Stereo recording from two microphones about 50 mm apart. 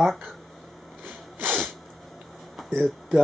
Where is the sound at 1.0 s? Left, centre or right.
Right.